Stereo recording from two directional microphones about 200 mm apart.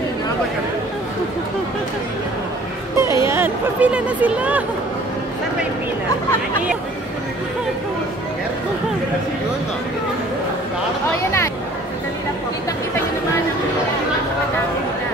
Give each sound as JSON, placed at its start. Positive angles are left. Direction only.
{"t": 3.0, "sound": "speech", "side_deg": -15}